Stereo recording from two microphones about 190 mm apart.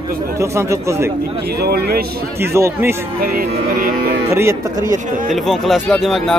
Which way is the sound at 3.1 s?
50° right (ahead or behind).